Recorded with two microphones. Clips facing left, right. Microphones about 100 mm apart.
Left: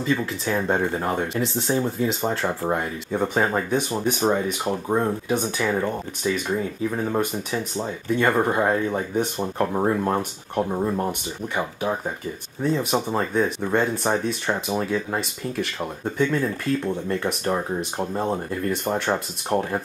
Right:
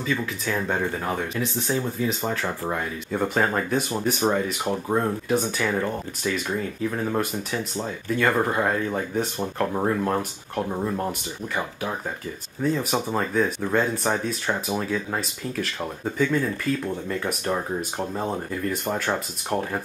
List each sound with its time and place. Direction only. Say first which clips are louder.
0.5 s speech: left 3 dB; 25° left (ahead or behind)
1.3 s speech: left 2 dB; centre (ahead or behind)
2.2 s speech: left 3 dB; 15° left (ahead or behind)
3.7 s speech: left 1 dB; centre (ahead or behind)